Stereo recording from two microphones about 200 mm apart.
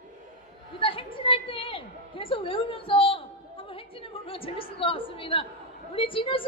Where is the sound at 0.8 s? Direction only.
25° left (ahead or behind).